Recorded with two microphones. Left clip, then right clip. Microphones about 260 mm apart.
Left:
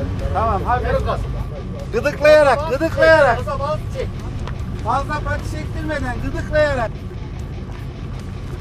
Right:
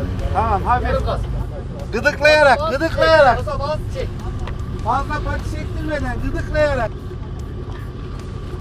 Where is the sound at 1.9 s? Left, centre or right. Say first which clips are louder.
Left 1 dB; left.